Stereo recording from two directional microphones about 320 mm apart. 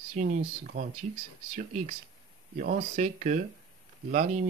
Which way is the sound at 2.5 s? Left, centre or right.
Right.